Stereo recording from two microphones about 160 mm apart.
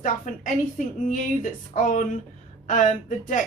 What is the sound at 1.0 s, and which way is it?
A woman's voice, 55° left (ahead or behind).